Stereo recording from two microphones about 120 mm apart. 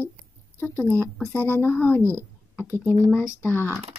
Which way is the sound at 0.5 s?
15° left (ahead or behind).